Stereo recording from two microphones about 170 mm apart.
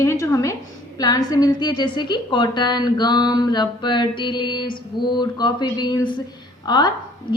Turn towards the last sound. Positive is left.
turn(degrees=25)  # may be behind; listen again after turning